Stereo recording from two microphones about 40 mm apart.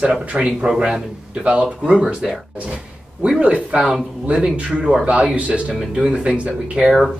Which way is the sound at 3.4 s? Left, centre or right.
Right.